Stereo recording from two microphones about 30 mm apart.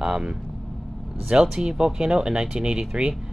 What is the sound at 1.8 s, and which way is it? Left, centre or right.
Speech, right.